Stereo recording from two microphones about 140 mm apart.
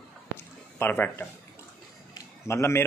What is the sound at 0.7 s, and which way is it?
A man's voice, 15° left (ahead or behind).